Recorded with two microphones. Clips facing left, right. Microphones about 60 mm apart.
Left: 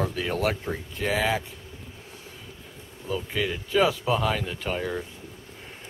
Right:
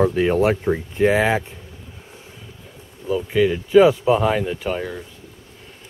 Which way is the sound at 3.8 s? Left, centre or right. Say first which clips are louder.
Right 7 dB; right.